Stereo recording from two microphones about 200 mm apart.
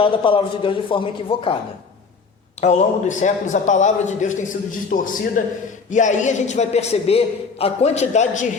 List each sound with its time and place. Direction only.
0.0 s a man's voice: 25° left (ahead or behind)
2.6 s a man's voice: 35° left (ahead or behind)